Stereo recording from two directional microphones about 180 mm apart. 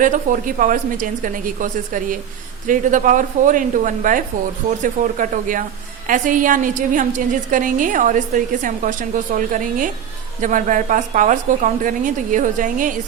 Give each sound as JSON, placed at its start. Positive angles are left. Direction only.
{"t": 0.0, "sound": "a woman's voice", "side_deg": -45}